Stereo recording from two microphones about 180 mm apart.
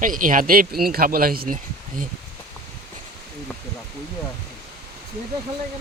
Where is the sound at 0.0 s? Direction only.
50° right (ahead or behind).